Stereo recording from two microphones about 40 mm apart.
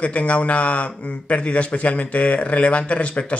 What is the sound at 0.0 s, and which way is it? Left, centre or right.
Speech, left.